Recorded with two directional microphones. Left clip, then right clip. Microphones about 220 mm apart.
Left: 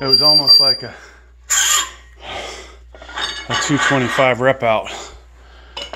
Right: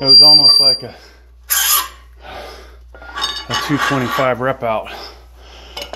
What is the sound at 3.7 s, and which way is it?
Speech, 10° left (ahead or behind).